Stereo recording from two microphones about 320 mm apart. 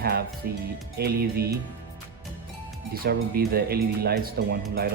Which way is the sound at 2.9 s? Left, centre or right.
Right.